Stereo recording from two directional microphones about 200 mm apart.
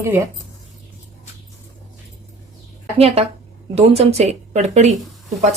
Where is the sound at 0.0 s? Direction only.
15° right (ahead or behind).